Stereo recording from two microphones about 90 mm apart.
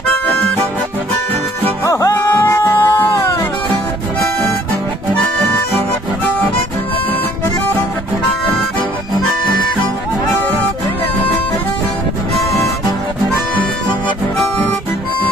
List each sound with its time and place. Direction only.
1.9 s music: 40° left (ahead or behind)
2.1 s music: 25° left (ahead or behind)
10.4 s music: 20° left (ahead or behind)